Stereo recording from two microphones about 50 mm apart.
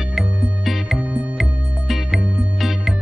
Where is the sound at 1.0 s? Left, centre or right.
Right.